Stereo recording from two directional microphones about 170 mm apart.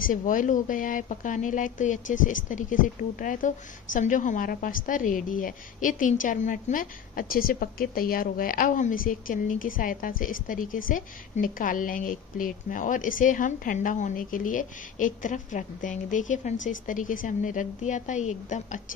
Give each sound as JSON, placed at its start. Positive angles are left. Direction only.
{"t": 0.0, "sound": "a woman's voice", "side_deg": 50}